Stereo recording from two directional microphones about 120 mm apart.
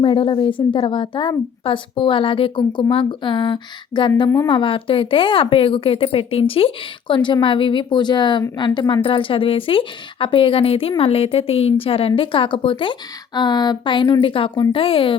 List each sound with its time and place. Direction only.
0.0 s a woman's voice: 45° left (ahead or behind)